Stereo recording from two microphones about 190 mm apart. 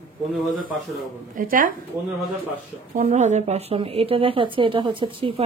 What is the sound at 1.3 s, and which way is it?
Speech, 45° right (ahead or behind).